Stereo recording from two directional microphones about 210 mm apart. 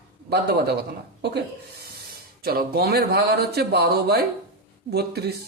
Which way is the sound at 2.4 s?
45° right (ahead or behind).